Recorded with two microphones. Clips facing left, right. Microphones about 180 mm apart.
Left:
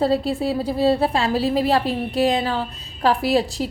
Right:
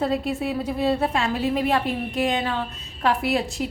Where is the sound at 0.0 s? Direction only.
35° left (ahead or behind).